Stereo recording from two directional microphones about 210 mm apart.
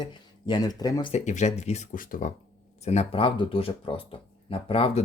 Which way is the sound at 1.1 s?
35° left (ahead or behind).